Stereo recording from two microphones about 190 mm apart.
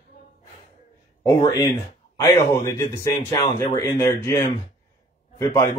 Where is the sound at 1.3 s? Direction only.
20° left (ahead or behind).